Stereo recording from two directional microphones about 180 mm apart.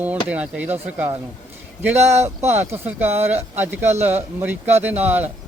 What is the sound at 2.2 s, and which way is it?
Speech, 15° right (ahead or behind).